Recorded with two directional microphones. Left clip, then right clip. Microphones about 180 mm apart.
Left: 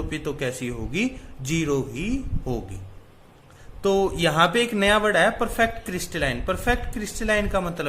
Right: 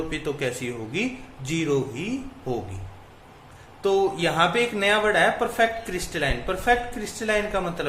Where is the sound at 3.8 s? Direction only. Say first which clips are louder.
Even; 45° left (ahead or behind).